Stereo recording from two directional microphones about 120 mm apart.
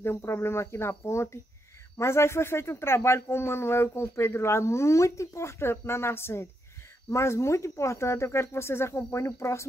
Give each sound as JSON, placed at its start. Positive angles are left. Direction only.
{"t": 0.0, "sound": "speech", "side_deg": 20}